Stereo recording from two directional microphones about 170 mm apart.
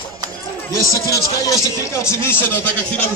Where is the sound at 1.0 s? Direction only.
20° left (ahead or behind).